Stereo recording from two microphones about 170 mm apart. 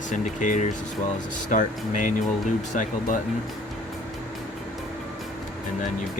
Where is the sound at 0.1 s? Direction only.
50° left (ahead or behind).